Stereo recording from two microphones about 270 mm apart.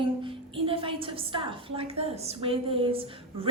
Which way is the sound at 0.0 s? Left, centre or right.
Centre.